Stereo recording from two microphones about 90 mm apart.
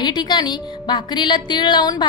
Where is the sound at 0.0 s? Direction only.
55° left (ahead or behind).